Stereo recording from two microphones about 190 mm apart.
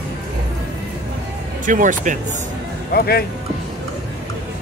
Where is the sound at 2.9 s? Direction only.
55° left (ahead or behind).